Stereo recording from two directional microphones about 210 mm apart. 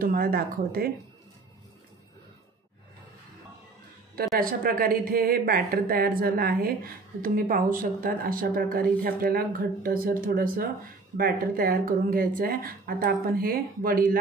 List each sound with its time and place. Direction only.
0.0 s a woman's voice: 45° right (ahead or behind)
4.1 s a woman's voice: 45° right (ahead or behind)